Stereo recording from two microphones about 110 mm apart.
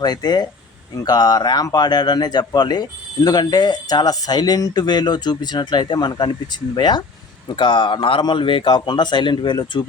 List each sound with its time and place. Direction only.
0.0 s a man's voice: 40° left (ahead or behind)